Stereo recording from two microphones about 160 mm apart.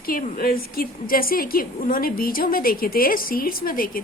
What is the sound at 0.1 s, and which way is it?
A woman's voice, 65° left (ahead or behind).